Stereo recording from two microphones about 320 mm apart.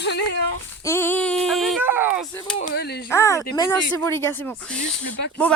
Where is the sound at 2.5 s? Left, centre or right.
Left.